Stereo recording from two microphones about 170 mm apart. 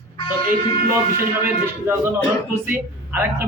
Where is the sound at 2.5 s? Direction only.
10° right (ahead or behind).